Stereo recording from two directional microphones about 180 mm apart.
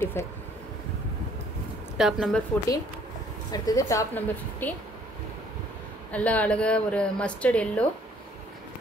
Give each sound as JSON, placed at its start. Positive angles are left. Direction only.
{"t": 0.0, "sound": "a woman's voice", "side_deg": 15}
{"t": 2.0, "sound": "speech", "side_deg": 0}
{"t": 3.5, "sound": "a woman's voice", "side_deg": 20}
{"t": 6.1, "sound": "a woman's voice", "side_deg": 10}